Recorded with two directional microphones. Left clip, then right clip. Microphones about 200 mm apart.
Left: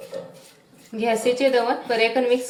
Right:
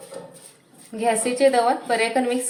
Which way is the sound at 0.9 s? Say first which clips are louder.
Even; 45° right (ahead or behind).